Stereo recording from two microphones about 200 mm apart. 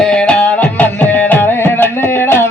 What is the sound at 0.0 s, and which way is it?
Music, 5° left (ahead or behind).